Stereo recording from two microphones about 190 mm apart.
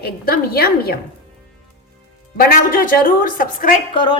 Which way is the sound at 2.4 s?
50° left (ahead or behind).